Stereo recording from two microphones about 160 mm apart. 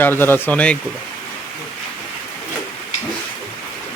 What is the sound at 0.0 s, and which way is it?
Speech, 15° left (ahead or behind).